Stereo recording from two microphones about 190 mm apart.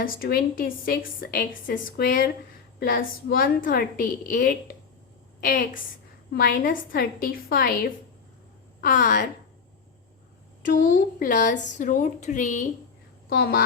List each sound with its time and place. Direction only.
0.0 s a woman's voice: 50° left (ahead or behind)
10.6 s a woman's voice: 45° left (ahead or behind)
13.3 s a woman's voice: 50° left (ahead or behind)